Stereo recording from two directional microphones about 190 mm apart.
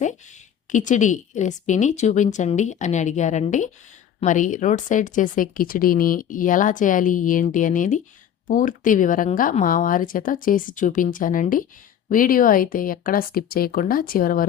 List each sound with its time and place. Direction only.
0.7 s a woman's voice: 40° left (ahead or behind)